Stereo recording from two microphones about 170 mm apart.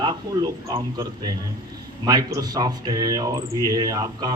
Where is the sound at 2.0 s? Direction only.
25° right (ahead or behind).